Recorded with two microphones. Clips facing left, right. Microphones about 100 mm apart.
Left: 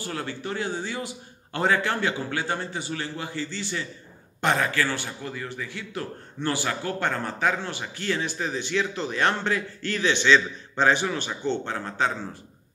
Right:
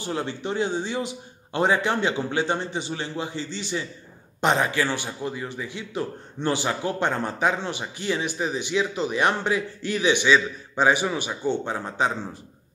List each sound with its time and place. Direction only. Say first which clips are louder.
0.0 s a man's voice: right 3 dB; 20° right (ahead or behind)